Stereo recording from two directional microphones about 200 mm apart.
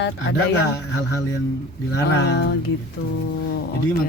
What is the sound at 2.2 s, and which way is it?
Speech, 60° left (ahead or behind).